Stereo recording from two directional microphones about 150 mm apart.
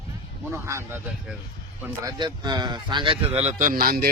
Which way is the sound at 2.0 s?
30° right (ahead or behind).